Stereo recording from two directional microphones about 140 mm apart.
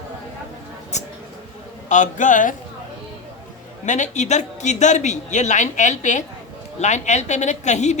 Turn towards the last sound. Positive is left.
turn(degrees=55)  # may be behind; listen again after turning